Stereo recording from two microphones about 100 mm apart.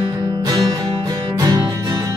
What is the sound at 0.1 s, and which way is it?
Music, 40° right (ahead or behind).